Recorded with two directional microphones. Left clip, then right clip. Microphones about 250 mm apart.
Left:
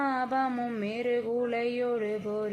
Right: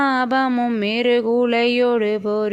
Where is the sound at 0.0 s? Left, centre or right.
Right.